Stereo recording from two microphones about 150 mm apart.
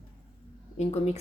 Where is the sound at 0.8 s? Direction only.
45° left (ahead or behind).